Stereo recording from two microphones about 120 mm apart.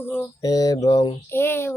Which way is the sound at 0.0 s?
20° left (ahead or behind).